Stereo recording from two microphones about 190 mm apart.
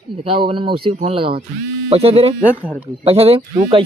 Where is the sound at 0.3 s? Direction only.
25° right (ahead or behind).